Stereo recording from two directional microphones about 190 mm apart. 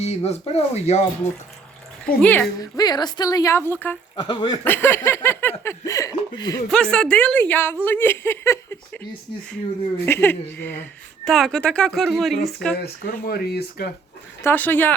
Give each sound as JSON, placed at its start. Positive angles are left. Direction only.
{"t": 0.0, "sound": "speech", "side_deg": 35}
{"t": 2.2, "sound": "speech", "side_deg": 10}
{"t": 2.6, "sound": "speech", "side_deg": 20}
{"t": 4.2, "sound": "speech", "side_deg": 20}
{"t": 4.6, "sound": "speech", "side_deg": 10}
{"t": 6.7, "sound": "speech", "side_deg": 5}
{"t": 10.1, "sound": "speech", "side_deg": 10}
{"t": 12.7, "sound": "speech", "side_deg": 55}
{"t": 14.4, "sound": "speech", "side_deg": 10}